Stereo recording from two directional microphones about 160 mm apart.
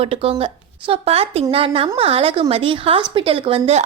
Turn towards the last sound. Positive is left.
turn(degrees=-35)  # may be behind; listen again after turning